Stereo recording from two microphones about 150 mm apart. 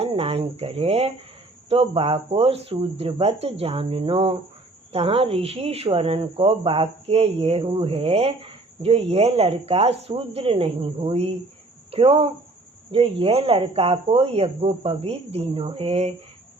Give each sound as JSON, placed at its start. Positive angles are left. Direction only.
{"t": 0.0, "sound": "speech", "side_deg": -40}